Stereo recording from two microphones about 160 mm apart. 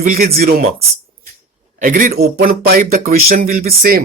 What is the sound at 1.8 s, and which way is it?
Speech, 60° right (ahead or behind).